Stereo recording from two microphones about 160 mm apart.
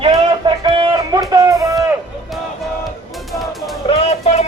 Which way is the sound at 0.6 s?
30° right (ahead or behind).